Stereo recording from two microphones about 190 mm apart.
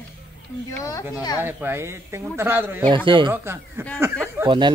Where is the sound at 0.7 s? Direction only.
15° left (ahead or behind).